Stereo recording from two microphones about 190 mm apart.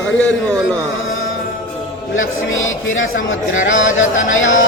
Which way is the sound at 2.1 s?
90° left.